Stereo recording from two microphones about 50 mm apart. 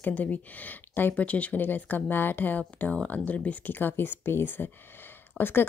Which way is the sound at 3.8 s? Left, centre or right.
Left.